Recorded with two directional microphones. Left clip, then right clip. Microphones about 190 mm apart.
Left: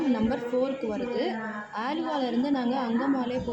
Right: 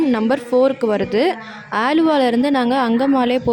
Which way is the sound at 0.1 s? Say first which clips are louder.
Right 10 dB; 50° right (ahead or behind).